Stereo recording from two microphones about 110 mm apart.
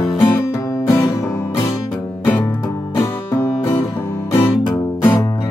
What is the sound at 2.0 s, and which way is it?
Music, 15° left (ahead or behind).